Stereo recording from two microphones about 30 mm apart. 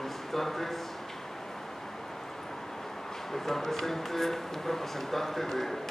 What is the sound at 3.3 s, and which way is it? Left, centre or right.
Speech, centre.